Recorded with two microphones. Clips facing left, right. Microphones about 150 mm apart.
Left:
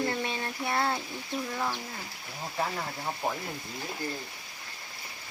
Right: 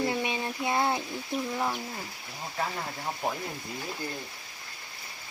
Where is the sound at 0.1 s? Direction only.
15° right (ahead or behind).